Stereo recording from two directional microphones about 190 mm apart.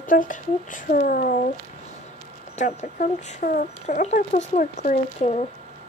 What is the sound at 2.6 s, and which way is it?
Speech, 40° left (ahead or behind).